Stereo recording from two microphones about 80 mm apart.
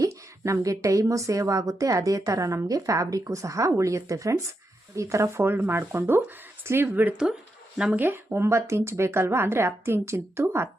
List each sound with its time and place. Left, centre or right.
0.0 s a woman's voice: right